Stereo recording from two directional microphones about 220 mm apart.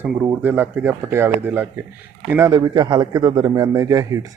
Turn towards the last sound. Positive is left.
turn(degrees=-15)  # may be behind; listen again after turning